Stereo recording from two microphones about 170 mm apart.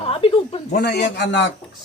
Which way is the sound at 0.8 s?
80° left.